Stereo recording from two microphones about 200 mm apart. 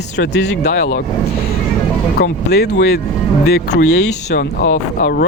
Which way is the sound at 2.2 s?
55° left (ahead or behind).